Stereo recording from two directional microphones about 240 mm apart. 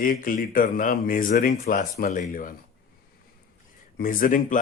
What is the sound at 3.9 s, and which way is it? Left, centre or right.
Speech, left.